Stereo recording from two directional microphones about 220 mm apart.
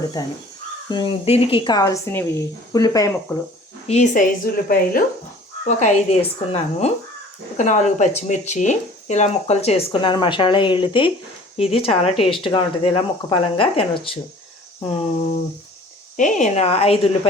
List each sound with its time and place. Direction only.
0.2 s speech: 15° left (ahead or behind)
3.8 s a woman's voice: 30° left (ahead or behind)